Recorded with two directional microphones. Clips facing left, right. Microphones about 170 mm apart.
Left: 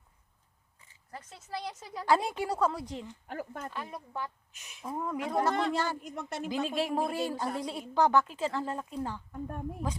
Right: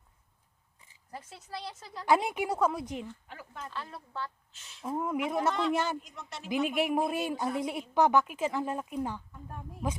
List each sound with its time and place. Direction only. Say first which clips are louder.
1.5 s a woman's voice: left 4 dB; 10° left (ahead or behind)
2.0 s a woman's voice: right 1 dB; 20° right (ahead or behind)
3.2 s speech: left 6 dB; 50° left (ahead or behind)
3.7 s a woman's voice: left 2 dB; 15° left (ahead or behind)
4.9 s speech: right 2 dB; 15° right (ahead or behind)
6.0 s speech: left 8 dB; 50° left (ahead or behind)
6.5 s a woman's voice: right 3 dB; 20° right (ahead or behind)
9.3 s speech: left 7 dB; 50° left (ahead or behind)